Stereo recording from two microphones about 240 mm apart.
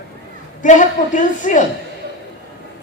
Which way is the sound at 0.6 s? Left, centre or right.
Left.